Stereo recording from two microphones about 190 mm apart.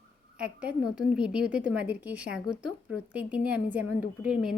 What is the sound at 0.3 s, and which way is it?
A woman's voice, 5° right (ahead or behind).